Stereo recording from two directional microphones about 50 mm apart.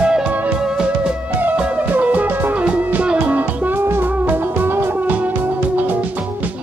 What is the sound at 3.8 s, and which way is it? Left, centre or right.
Music, right.